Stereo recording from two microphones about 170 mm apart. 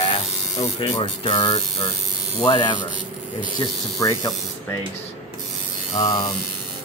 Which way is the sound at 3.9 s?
20° left (ahead or behind).